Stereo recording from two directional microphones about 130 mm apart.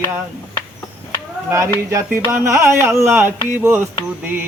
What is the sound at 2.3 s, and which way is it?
Speech, 20° right (ahead or behind).